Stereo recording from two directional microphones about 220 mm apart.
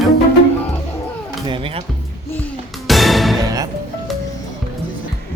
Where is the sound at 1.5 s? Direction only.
25° right (ahead or behind).